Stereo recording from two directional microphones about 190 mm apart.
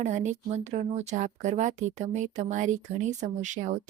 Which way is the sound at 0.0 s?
40° right (ahead or behind).